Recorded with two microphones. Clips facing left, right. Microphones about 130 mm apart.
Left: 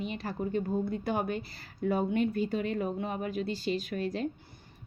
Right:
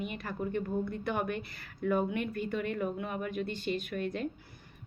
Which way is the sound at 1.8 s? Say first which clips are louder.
Left 2 dB; 30° left (ahead or behind).